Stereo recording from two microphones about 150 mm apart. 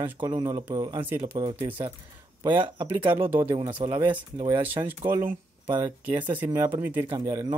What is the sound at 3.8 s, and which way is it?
Speech, 25° right (ahead or behind).